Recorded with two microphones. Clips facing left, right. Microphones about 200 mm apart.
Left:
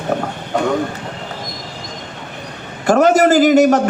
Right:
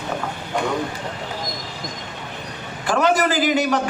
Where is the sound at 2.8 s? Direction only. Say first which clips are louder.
Left 7 dB; 45° left (ahead or behind).